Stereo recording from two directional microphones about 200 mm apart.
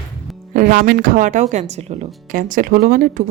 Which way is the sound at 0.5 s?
45° right (ahead or behind).